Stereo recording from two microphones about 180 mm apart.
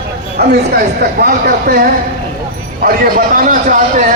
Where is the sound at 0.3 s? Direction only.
60° right (ahead or behind).